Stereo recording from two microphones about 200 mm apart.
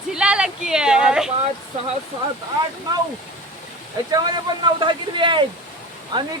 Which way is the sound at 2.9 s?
20° right (ahead or behind).